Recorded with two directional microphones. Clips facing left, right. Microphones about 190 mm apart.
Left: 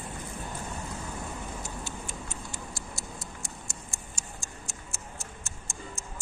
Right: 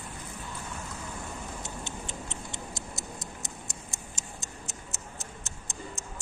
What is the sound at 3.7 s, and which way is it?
Tick-tock, 20° right (ahead or behind).